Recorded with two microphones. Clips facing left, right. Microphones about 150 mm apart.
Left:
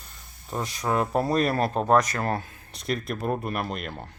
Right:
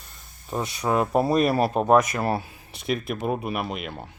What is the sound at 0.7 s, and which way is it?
Speech, 10° right (ahead or behind).